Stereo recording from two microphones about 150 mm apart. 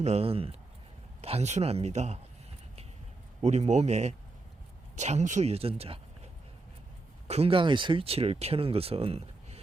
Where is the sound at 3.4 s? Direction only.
50° right (ahead or behind).